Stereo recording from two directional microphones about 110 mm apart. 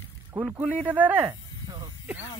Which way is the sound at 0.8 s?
15° right (ahead or behind).